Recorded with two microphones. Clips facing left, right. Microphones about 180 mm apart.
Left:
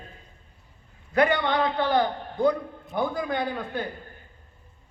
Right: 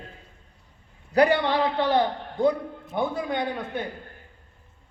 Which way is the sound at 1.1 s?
35° right (ahead or behind).